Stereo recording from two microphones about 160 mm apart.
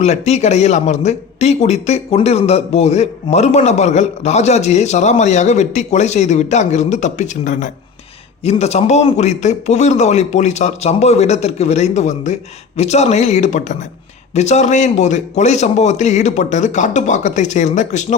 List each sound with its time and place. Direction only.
0.0 s speech: 45° left (ahead or behind)